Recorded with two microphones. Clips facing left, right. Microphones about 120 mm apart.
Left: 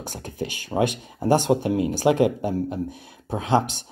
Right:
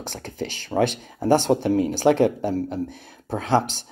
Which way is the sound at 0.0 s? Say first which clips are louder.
Even; 10° left (ahead or behind).